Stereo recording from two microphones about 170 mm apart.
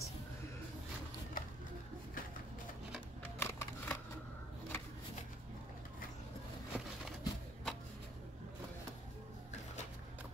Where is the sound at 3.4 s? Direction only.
15° left (ahead or behind).